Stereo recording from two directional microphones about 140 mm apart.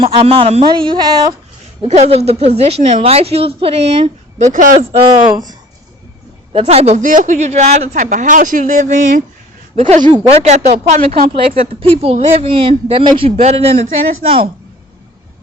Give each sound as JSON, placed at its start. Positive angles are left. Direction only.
{"t": 0.0, "sound": "a woman's voice", "side_deg": -40}
{"t": 0.6, "sound": "a sound", "side_deg": -35}
{"t": 1.9, "sound": "a woman's voice", "side_deg": -50}
{"t": 4.9, "sound": "speech", "side_deg": -35}
{"t": 6.5, "sound": "a woman's voice", "side_deg": -45}
{"t": 9.7, "sound": "a sound", "side_deg": -40}
{"t": 10.2, "sound": "a woman's voice", "side_deg": -50}